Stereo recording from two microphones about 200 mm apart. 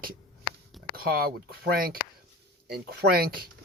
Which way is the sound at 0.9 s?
50° right (ahead or behind).